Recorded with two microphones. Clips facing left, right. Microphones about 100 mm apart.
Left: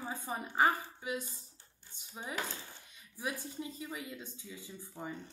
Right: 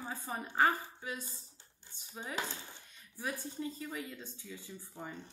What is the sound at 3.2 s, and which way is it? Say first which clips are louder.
Speech: right 1 dB; 15° left (ahead or behind).